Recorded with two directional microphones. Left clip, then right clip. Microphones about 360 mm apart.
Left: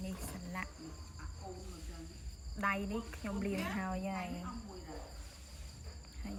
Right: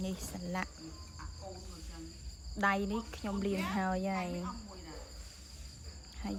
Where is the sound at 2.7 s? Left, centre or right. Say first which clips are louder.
Right 4 dB; centre.